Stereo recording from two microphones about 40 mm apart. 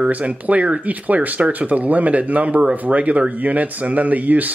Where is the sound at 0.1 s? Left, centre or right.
Right.